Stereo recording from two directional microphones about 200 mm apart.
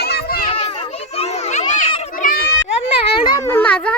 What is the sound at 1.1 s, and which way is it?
Children playing, 35° left (ahead or behind).